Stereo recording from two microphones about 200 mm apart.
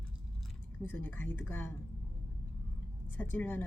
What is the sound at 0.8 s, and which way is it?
Speech, 10° left (ahead or behind).